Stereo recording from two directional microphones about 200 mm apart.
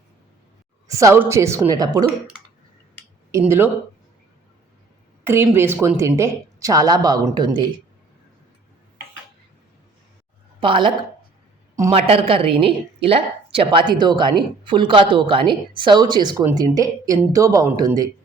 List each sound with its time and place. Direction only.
0.9 s speech: 15° right (ahead or behind)
3.3 s speech: 10° right (ahead or behind)
5.2 s speech: 10° right (ahead or behind)
10.6 s speech: 25° right (ahead or behind)